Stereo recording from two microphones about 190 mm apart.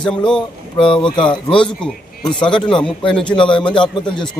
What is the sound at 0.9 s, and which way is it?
Speech, 25° left (ahead or behind).